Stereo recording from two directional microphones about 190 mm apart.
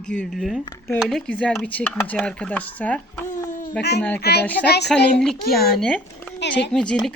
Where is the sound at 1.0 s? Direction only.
Centre (ahead or behind).